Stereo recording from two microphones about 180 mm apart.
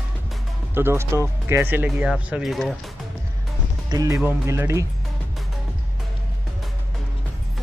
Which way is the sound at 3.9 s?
20° right (ahead or behind).